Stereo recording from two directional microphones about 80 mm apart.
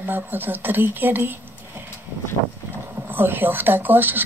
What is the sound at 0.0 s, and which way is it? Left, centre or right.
Speech, right.